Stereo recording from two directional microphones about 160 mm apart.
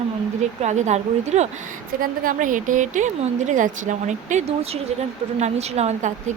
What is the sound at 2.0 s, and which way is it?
Speech, 60° right (ahead or behind).